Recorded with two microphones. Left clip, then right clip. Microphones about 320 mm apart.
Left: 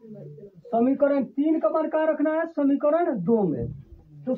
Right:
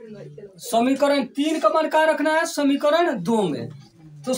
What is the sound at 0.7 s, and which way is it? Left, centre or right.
Speech, left.